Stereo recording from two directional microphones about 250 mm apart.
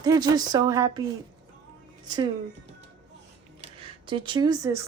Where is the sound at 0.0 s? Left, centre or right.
Centre.